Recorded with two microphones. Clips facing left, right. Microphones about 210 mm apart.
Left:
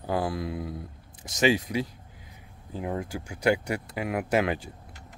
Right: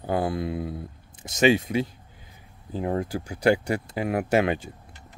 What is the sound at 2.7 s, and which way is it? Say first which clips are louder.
Speech: right 5 dB; 35° right (ahead or behind).